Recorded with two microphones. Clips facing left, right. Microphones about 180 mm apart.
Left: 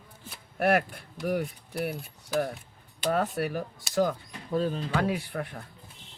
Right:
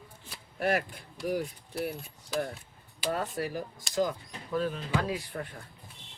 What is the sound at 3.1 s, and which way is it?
Speech, 65° left (ahead or behind).